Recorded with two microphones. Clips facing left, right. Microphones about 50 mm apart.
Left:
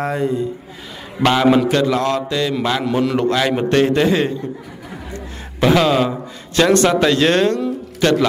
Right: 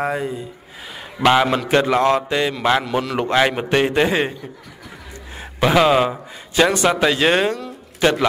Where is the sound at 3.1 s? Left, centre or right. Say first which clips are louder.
Left 1 dB; right.